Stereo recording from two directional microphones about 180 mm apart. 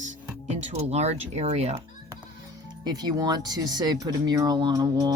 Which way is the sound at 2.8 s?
20° right (ahead or behind).